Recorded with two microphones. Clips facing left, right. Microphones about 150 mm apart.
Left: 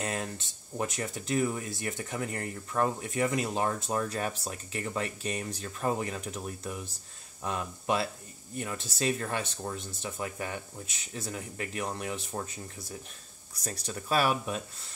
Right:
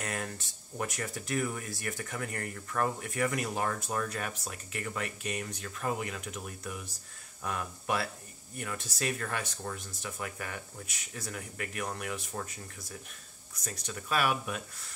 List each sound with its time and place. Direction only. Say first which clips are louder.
0.0 s speech: left 3 dB; 25° left (ahead or behind)